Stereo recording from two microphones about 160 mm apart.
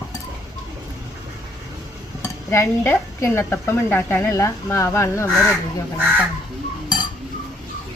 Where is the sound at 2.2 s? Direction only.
15° left (ahead or behind).